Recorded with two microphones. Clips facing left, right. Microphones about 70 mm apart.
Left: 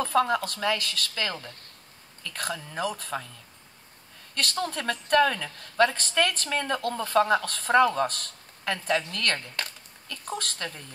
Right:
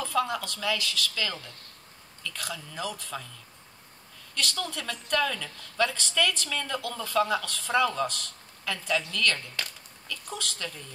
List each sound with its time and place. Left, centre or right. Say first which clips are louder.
0.0 s a woman's voice: left 4 dB; left
4.4 s a woman's voice: left 3 dB; left